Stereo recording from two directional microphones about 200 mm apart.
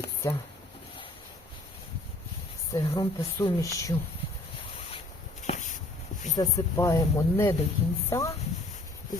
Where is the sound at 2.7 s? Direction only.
15° left (ahead or behind).